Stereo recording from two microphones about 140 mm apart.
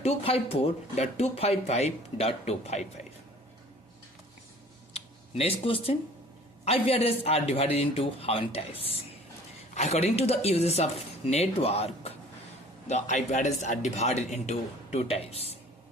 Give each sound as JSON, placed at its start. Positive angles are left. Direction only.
{"t": 0.0, "sound": "speech", "side_deg": 45}
{"t": 4.9, "sound": "speech", "side_deg": 45}
{"t": 12.9, "sound": "a man's voice", "side_deg": 60}